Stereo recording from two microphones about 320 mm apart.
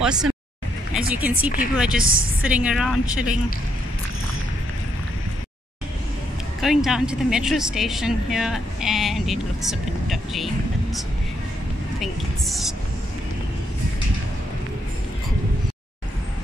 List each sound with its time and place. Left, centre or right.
0.0 s speech: centre
2.0 s a woman's voice: right
2.4 s speech: centre
6.6 s speech: centre